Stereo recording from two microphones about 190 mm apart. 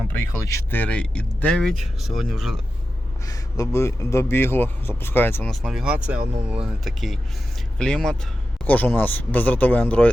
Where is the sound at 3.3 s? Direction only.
20° left (ahead or behind).